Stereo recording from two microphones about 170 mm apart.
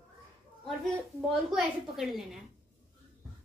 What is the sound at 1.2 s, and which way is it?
Speech, 5° right (ahead or behind).